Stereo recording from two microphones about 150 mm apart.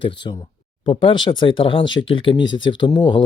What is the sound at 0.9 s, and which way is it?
Speech, 35° left (ahead or behind).